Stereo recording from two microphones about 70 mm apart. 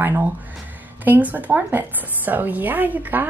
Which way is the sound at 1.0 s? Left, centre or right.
Right.